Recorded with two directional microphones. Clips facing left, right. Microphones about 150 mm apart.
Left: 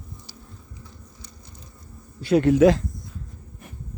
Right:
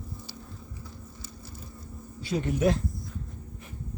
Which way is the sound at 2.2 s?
70° left (ahead or behind).